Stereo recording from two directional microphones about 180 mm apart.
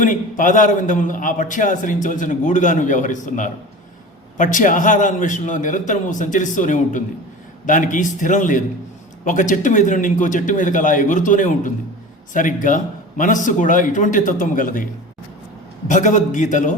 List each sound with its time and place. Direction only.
0.0 s a man's voice: 45° left (ahead or behind)
15.9 s a man's voice: 45° left (ahead or behind)